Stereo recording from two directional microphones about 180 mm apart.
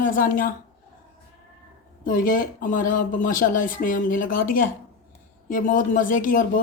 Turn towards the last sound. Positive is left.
turn(degrees=50)  # may be behind; listen again after turning